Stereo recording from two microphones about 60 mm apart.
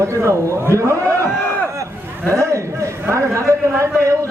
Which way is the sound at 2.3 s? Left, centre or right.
Right.